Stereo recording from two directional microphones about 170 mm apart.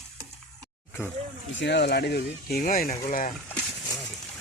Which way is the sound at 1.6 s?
85° left.